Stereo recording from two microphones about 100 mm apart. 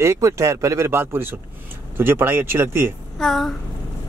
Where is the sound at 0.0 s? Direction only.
30° right (ahead or behind).